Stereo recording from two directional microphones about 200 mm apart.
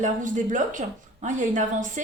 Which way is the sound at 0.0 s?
40° right (ahead or behind).